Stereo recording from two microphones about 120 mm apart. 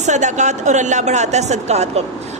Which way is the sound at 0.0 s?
80° right.